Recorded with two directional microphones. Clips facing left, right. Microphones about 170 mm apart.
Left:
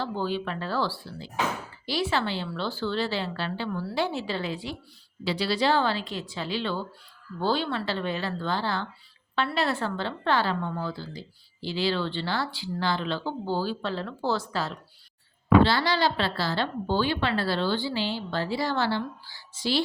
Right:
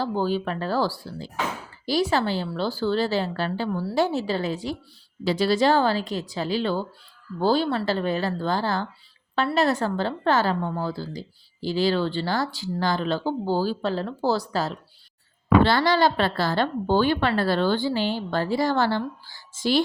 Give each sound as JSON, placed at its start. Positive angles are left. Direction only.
{"t": 0.0, "sound": "a woman's voice", "side_deg": -40}
{"t": 15.6, "sound": "a woman's voice", "side_deg": -50}